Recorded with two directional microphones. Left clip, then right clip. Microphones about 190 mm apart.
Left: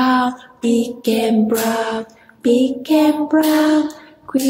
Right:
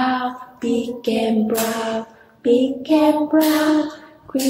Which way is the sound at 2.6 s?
35° left (ahead or behind).